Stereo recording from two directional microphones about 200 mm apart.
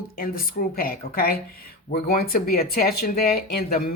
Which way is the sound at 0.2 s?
45° left (ahead or behind).